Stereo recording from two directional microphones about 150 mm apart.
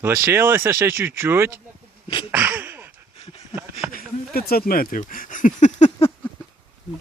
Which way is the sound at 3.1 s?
40° left (ahead or behind).